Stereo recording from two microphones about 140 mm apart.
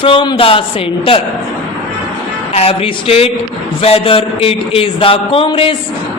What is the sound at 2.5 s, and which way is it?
Speech, 45° left (ahead or behind).